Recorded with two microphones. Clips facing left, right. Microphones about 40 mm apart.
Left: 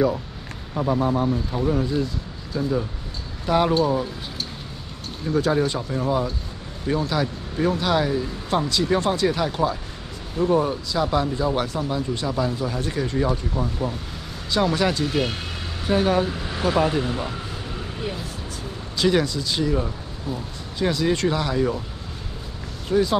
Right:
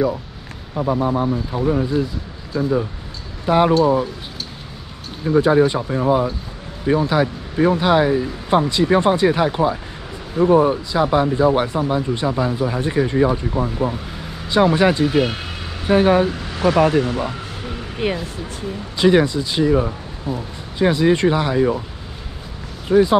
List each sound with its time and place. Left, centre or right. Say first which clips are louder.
0.7 s speech: right 3 dB; centre
5.2 s speech: right 7 dB; centre
15.0 s speech: right 6 dB; centre
15.9 s speech: right 6 dB; right
16.3 s speech: right 5 dB; centre
18.0 s speech: right 10 dB; right
18.9 s speech: right 6 dB; right
22.8 s speech: right 6 dB; right